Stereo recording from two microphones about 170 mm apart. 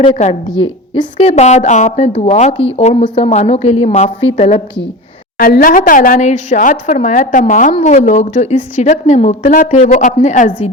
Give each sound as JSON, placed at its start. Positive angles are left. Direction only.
{"t": 0.4, "sound": "a woman's voice", "side_deg": 25}
{"t": 5.4, "sound": "a woman's voice", "side_deg": 60}